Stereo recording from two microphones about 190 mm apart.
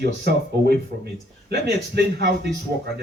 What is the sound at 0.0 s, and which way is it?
Speech, 60° right (ahead or behind).